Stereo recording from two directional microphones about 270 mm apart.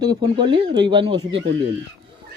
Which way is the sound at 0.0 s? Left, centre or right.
Centre.